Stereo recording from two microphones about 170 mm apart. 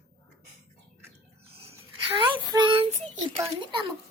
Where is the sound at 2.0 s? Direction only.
30° right (ahead or behind).